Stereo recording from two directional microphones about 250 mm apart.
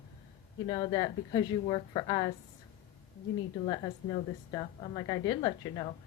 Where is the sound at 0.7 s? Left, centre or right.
Centre.